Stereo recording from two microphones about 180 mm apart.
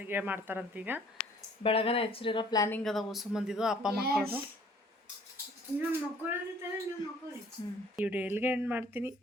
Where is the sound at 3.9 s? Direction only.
60° right (ahead or behind).